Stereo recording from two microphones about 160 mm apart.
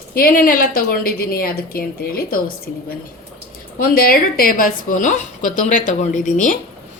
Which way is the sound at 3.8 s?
65° left (ahead or behind).